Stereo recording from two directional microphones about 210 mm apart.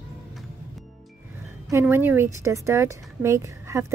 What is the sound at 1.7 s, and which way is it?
A woman's voice, 10° right (ahead or behind).